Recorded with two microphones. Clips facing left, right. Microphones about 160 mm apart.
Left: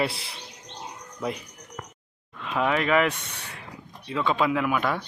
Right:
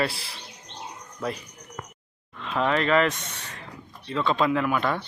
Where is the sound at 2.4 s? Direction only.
10° left (ahead or behind).